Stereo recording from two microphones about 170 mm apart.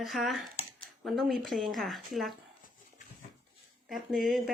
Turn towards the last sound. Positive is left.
turn(degrees=0)  # may be behind; listen again after turning